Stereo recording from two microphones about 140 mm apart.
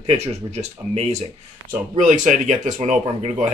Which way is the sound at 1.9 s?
60° right (ahead or behind).